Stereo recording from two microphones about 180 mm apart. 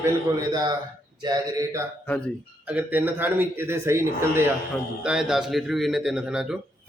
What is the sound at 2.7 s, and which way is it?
A man's voice, 10° right (ahead or behind).